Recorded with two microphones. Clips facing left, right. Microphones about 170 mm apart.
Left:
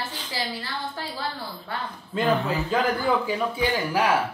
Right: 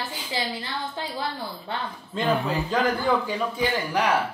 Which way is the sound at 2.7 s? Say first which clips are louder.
Even; 5° left (ahead or behind).